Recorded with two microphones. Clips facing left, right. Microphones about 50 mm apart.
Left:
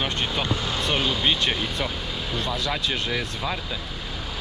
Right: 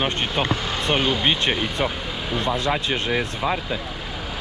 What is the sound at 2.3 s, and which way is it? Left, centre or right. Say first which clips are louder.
Speech: right 6 dB; right.